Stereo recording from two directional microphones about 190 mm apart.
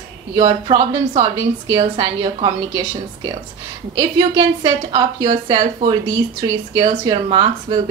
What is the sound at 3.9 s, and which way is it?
A woman's voice, 20° right (ahead or behind).